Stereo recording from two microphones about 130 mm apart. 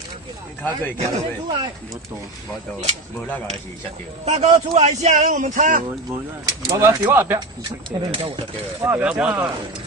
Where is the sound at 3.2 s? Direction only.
10° left (ahead or behind).